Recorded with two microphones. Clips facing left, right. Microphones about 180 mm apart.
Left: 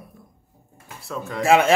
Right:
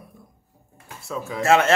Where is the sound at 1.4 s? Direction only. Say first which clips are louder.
Left 1 dB; 15° left (ahead or behind).